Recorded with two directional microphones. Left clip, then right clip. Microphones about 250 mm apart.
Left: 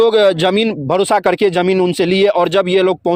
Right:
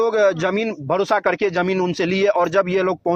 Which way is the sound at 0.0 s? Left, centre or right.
Left.